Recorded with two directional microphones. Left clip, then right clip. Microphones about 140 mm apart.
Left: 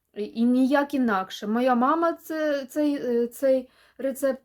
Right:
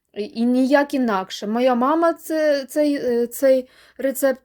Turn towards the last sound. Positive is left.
turn(degrees=-90)